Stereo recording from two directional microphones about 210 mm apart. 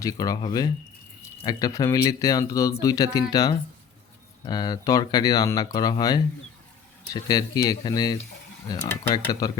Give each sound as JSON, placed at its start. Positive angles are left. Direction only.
{"t": 0.0, "sound": "speech", "side_deg": 15}